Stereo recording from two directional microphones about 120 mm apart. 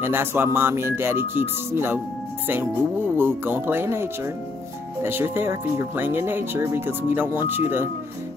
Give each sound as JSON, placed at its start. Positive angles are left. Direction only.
{"t": 0.0, "sound": "speech", "side_deg": -20}
{"t": 3.2, "sound": "speech", "side_deg": -20}